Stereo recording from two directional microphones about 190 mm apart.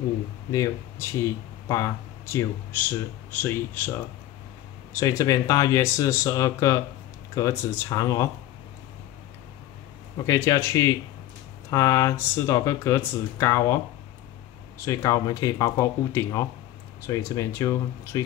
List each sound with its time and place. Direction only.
0.5 s speech: 15° left (ahead or behind)
4.9 s speech: 15° left (ahead or behind)
10.1 s speech: 15° left (ahead or behind)
14.9 s speech: 15° left (ahead or behind)